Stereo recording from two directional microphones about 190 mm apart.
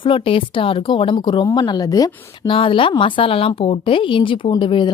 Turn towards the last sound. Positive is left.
turn(degrees=25)  # may be behind; listen again after turning